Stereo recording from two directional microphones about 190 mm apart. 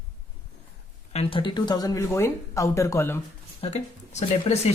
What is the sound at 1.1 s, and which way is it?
Speech, 30° left (ahead or behind).